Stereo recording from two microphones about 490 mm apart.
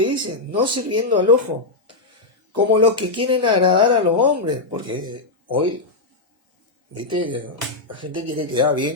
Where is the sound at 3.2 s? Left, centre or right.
Centre.